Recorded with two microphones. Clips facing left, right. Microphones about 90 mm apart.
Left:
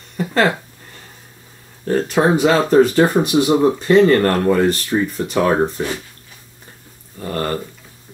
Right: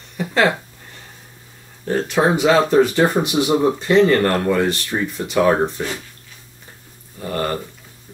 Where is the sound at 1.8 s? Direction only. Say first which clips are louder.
Left 2 dB; 40° left (ahead or behind).